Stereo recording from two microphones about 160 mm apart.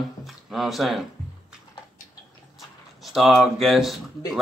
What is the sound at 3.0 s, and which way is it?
Speech, centre (ahead or behind).